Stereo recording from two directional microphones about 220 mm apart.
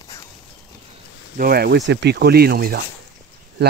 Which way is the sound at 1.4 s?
45° right (ahead or behind).